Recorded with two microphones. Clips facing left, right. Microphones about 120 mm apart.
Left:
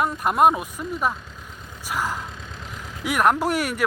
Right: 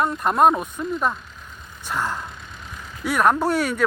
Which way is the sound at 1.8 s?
10° left (ahead or behind).